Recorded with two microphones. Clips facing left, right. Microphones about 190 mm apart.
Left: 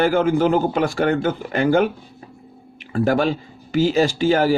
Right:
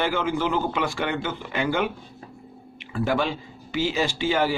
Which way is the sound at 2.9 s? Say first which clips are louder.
Left 6 dB; 45° left (ahead or behind).